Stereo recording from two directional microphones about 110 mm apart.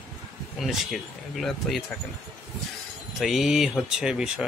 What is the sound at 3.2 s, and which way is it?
Speech, centre (ahead or behind).